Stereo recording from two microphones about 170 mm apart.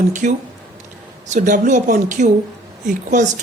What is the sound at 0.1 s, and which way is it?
Speech, 45° right (ahead or behind).